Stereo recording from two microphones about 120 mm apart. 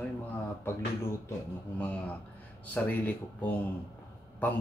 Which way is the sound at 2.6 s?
15° left (ahead or behind).